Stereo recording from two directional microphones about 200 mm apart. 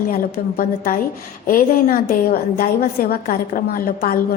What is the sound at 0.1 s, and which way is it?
A woman's voice, 50° left (ahead or behind).